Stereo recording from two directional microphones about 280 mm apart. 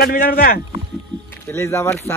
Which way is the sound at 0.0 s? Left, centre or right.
Left.